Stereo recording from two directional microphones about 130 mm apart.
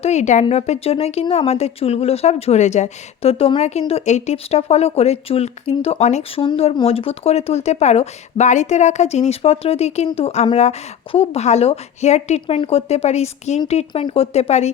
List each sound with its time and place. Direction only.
0.0 s a woman's voice: 60° left (ahead or behind)
0.4 s speech: 50° left (ahead or behind)
6.4 s a woman's voice: 45° left (ahead or behind)